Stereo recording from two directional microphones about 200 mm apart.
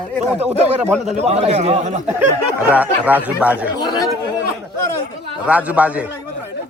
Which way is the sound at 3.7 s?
20° left (ahead or behind).